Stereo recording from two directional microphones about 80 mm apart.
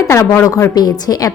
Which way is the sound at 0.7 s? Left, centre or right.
Left.